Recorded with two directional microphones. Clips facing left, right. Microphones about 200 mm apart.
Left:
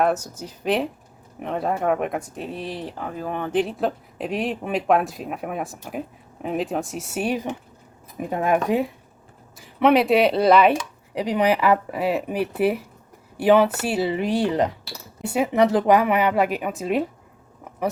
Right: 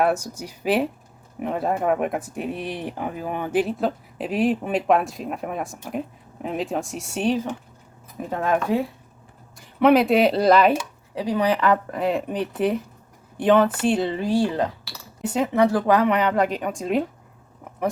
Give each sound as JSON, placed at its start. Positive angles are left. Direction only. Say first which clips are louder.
{"t": 0.0, "sound": "speech", "louder": "even", "side_deg": -15}
{"t": 9.6, "sound": "speech", "louder": "right 1 dB", "side_deg": 0}
{"t": 11.1, "sound": "speech", "louder": "left 1 dB", "side_deg": 20}
{"t": 14.2, "sound": "speech", "louder": "left 1 dB", "side_deg": 20}